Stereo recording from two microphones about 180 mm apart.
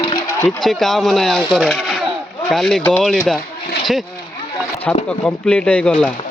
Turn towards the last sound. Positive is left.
turn(degrees=5)  # may be behind; listen again after turning